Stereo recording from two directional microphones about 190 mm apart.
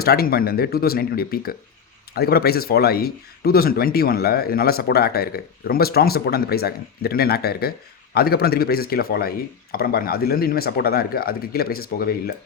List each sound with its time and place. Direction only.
0.0 s speech: 55° left (ahead or behind)